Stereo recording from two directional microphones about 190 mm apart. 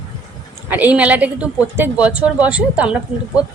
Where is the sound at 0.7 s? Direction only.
10° right (ahead or behind).